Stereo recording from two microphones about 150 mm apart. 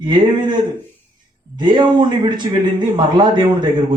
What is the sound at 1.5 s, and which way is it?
A man's voice, 30° right (ahead or behind).